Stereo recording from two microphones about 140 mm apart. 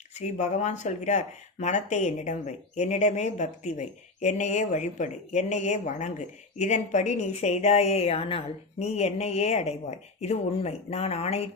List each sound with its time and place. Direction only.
0.2 s a woman's voice: 55° left (ahead or behind)